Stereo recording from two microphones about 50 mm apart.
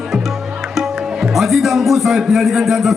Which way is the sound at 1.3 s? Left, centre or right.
Centre.